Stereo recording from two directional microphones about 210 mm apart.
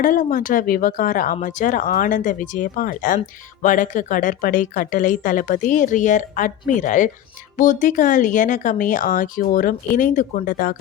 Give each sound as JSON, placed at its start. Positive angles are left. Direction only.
{"t": 0.0, "sound": "speech", "side_deg": 40}